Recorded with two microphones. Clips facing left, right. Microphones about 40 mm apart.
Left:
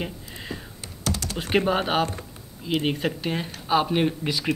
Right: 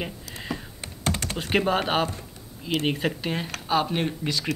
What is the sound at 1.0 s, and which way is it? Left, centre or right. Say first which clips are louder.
Typing: right 1 dB; right.